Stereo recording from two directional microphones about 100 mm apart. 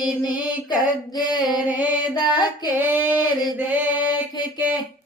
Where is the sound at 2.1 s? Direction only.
45° left (ahead or behind).